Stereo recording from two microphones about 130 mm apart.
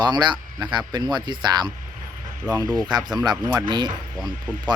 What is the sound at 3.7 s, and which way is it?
Speech, 35° right (ahead or behind).